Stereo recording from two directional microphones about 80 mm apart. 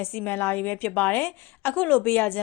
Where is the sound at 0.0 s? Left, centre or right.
Left.